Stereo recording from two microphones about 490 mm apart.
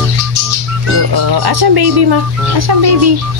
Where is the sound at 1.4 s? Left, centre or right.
Right.